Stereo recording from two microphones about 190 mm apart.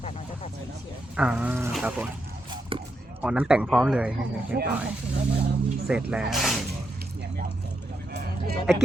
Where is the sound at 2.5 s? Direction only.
25° right (ahead or behind).